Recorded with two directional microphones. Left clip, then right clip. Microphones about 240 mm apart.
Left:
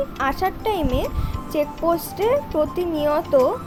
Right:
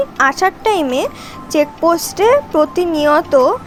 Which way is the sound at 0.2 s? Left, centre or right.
Centre.